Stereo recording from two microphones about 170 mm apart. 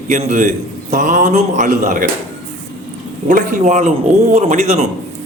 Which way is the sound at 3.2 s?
50° right (ahead or behind).